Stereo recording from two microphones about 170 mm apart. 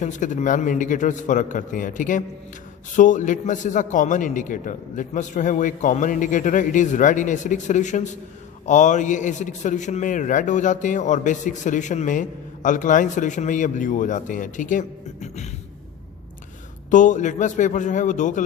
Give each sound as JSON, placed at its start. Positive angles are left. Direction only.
{"t": 0.0, "sound": "a man's voice", "side_deg": 45}
{"t": 16.9, "sound": "a man's voice", "side_deg": 45}